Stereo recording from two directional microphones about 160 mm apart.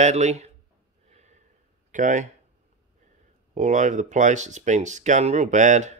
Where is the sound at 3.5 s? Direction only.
50° right (ahead or behind).